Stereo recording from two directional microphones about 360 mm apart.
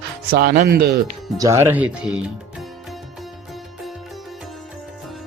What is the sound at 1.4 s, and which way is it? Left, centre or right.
Speech, centre.